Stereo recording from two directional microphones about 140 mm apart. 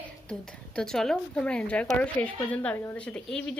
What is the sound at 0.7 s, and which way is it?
A woman's voice, 5° left (ahead or behind).